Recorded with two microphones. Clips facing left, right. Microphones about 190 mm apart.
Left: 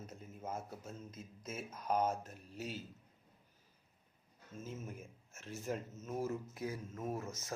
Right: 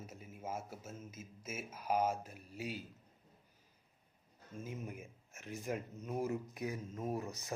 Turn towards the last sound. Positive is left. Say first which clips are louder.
# right 1 dB
turn(degrees=-15)  # may be behind; listen again after turning